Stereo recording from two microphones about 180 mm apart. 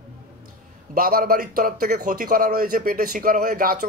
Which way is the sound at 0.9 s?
55° right (ahead or behind).